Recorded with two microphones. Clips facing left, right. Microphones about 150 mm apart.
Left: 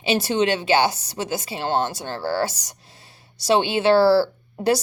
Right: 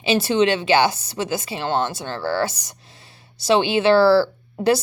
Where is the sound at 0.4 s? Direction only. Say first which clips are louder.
Right 1 dB; 40° left (ahead or behind).